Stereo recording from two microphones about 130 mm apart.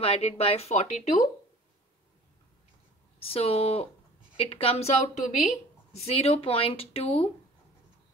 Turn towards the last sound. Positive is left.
turn(degrees=50)  # may be behind; listen again after turning